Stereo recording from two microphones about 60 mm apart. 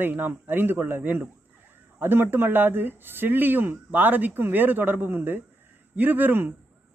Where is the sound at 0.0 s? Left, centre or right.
Right.